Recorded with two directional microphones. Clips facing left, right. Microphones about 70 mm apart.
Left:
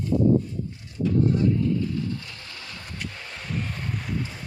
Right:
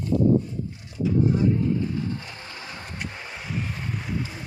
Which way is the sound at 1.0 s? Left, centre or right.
Centre.